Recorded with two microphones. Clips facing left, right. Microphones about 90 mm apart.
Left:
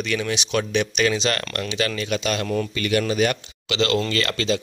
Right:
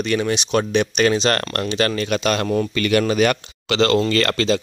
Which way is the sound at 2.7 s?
65° right (ahead or behind).